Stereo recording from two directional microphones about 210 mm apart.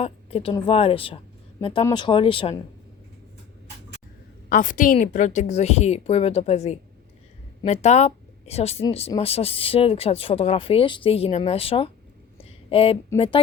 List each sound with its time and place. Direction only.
0.0 s speech: 30° left (ahead or behind)
4.4 s a woman's voice: 40° left (ahead or behind)
12.4 s a sound: 25° left (ahead or behind)
13.1 s speech: 25° left (ahead or behind)